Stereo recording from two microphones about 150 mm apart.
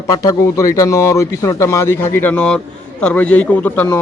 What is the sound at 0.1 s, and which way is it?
A man's voice, 25° left (ahead or behind).